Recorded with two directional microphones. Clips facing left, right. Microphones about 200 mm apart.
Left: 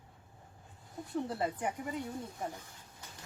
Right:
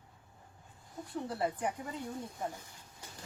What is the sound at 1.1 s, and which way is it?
Speech, 20° left (ahead or behind).